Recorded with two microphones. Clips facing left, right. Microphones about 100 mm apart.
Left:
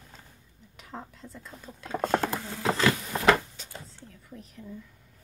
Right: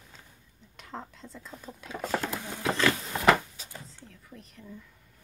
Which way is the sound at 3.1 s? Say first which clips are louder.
Right 1 dB; 5° right (ahead or behind).